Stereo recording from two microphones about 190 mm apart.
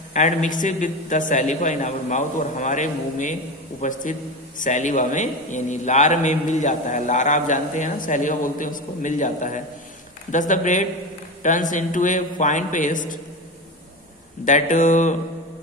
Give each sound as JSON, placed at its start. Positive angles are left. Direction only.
{"t": 0.1, "sound": "a man's voice", "side_deg": 40}
{"t": 14.4, "sound": "a man's voice", "side_deg": 40}